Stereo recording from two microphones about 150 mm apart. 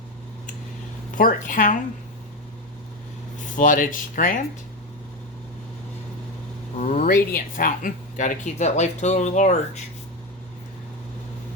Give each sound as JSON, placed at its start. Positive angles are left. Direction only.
{"t": 1.1, "sound": "speech", "side_deg": 65}
{"t": 3.5, "sound": "speech", "side_deg": 60}
{"t": 6.7, "sound": "speech", "side_deg": 60}